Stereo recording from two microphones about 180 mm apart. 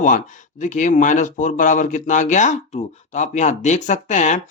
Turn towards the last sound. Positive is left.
turn(degrees=40)  # may be behind; listen again after turning